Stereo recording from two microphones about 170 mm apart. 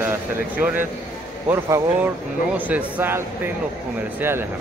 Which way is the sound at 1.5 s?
20° right (ahead or behind).